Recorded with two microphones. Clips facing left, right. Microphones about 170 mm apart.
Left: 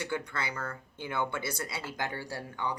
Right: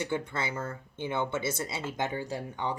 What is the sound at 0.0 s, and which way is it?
Speech, 20° right (ahead or behind).